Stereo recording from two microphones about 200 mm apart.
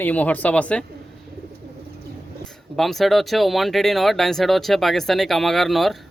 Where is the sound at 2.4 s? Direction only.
Centre (ahead or behind).